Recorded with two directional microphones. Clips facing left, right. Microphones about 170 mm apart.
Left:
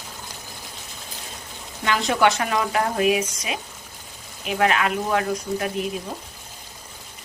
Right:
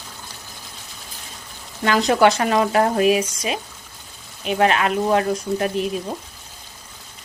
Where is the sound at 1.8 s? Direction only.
40° right (ahead or behind).